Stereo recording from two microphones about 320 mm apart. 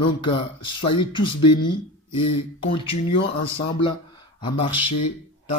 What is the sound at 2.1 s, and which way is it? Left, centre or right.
Speech, left.